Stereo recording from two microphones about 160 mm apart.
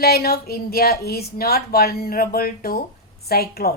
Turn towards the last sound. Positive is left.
turn(degrees=75)  # may be behind; listen again after turning